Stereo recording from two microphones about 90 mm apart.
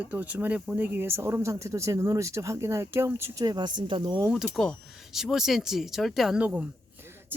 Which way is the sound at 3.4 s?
55° right (ahead or behind).